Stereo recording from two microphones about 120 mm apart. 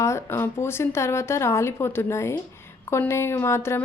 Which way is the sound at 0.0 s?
20° left (ahead or behind).